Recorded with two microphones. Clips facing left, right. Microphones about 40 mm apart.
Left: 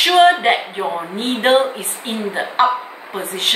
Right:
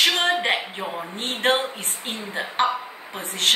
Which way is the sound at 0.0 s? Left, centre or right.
Centre.